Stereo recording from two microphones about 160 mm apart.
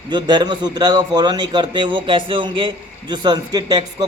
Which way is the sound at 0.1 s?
30° right (ahead or behind).